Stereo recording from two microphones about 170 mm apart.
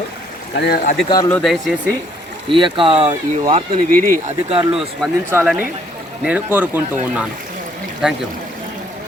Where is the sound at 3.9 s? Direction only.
55° right (ahead or behind).